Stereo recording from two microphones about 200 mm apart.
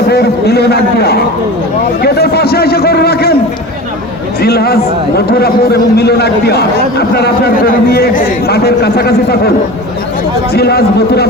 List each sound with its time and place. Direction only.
0.1 s a man's voice: 55° left (ahead or behind)
4.4 s a man's voice: 50° left (ahead or behind)
10.5 s a man's voice: 50° left (ahead or behind)